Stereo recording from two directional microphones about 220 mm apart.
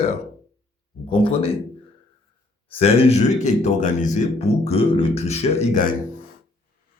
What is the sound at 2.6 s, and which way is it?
A man's voice, 25° left (ahead or behind).